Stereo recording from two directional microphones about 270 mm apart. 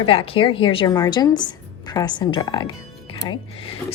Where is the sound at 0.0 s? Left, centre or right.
Centre.